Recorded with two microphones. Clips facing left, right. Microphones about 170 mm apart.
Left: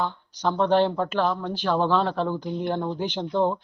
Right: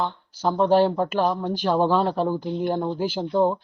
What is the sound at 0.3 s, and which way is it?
Speech, 10° right (ahead or behind).